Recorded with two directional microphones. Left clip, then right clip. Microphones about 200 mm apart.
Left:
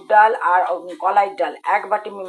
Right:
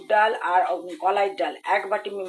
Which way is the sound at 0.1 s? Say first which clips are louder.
Left 6 dB; centre (ahead or behind).